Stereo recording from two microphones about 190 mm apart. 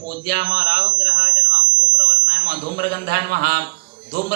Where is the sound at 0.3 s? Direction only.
60° right (ahead or behind).